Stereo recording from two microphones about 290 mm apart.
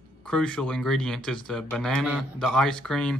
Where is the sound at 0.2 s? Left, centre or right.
Centre.